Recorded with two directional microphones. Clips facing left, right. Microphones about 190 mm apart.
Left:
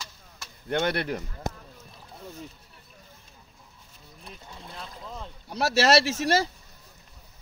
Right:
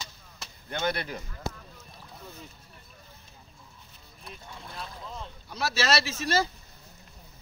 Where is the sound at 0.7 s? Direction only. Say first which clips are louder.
Left 4 dB; 65° left (ahead or behind).